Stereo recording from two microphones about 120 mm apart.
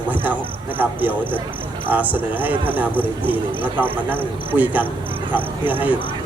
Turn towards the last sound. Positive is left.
turn(degrees=-15)  # may be behind; listen again after turning